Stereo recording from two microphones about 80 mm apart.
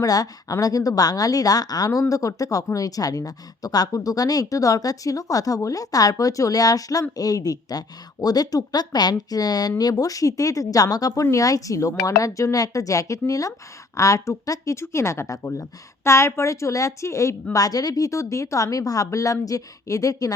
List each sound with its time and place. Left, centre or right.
0.0 s speech: left
17.5 s speech: left